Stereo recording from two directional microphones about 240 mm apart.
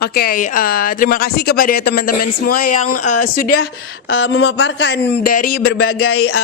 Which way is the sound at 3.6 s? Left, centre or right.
Left.